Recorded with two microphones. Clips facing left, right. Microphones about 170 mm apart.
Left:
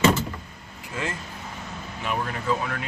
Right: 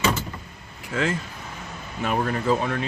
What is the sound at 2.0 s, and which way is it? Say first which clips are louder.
Speech: right 4 dB; 40° right (ahead or behind).